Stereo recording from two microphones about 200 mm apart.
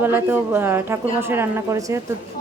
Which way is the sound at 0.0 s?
10° right (ahead or behind).